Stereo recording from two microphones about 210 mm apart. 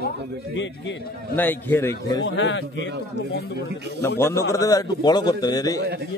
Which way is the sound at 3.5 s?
50° right (ahead or behind).